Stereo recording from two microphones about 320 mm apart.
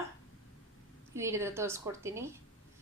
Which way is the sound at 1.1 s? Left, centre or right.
Centre.